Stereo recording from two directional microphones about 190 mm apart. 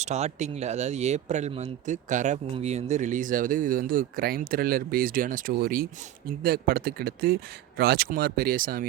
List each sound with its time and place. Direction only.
0.0 s speech: 35° right (ahead or behind)